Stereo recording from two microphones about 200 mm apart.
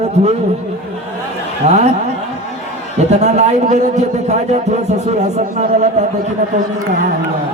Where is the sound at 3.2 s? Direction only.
35° right (ahead or behind).